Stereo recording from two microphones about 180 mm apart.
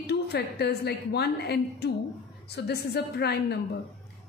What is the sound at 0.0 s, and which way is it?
A woman's voice, 65° left (ahead or behind).